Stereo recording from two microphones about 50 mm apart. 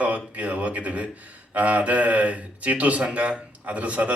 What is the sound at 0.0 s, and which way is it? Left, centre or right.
Speech, right.